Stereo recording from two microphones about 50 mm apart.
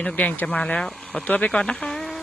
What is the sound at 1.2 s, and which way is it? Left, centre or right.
Speech, left.